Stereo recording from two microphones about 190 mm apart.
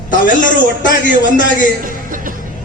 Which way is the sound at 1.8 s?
45° right (ahead or behind).